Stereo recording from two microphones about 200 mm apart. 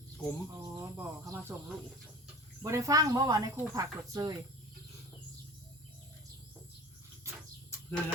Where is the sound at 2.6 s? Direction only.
15° right (ahead or behind).